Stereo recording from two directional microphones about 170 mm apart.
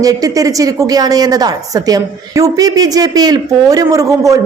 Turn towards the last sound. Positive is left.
turn(degrees=-20)  # may be behind; listen again after turning